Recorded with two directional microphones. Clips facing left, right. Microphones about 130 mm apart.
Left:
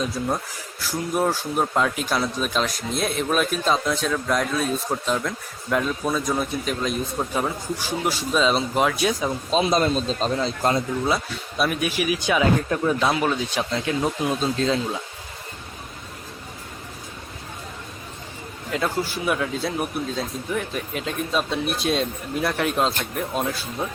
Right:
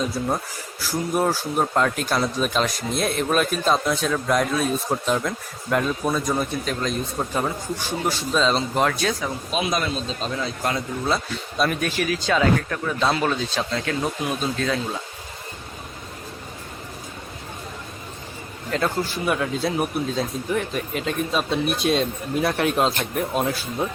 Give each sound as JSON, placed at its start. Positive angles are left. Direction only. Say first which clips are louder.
{"t": 0.2, "sound": "speech", "louder": "right 1 dB", "side_deg": -5}
{"t": 9.2, "sound": "speech", "louder": "left 4 dB", "side_deg": 30}
{"t": 11.0, "sound": "speech", "louder": "even", "side_deg": 5}
{"t": 18.7, "sound": "speech", "louder": "right 1 dB", "side_deg": 0}